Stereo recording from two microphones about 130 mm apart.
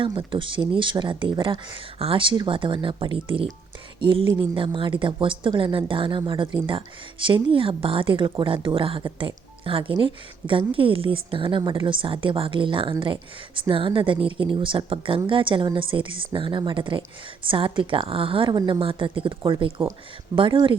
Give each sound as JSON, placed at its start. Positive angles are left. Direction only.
{"t": 0.0, "sound": "speech", "side_deg": -40}